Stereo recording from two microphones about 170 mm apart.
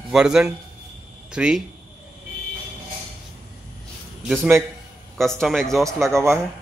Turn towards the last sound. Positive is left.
turn(degrees=-15)  # may be behind; listen again after turning